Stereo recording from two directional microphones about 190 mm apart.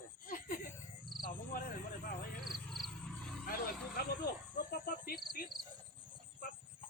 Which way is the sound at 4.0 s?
55° left (ahead or behind).